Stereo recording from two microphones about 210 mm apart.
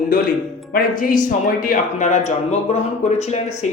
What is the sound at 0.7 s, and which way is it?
Speech, 40° left (ahead or behind).